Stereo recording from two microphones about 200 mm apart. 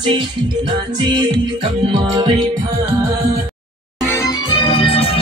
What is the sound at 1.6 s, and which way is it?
Music, 25° right (ahead or behind).